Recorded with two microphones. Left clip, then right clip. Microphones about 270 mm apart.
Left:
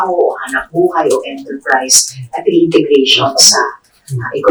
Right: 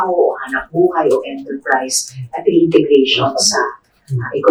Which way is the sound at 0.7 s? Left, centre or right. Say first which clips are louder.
Left 1 dB; centre.